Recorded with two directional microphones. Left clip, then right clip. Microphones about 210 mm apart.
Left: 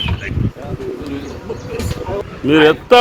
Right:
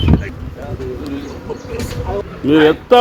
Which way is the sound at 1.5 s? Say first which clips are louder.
Even; 35° left (ahead or behind).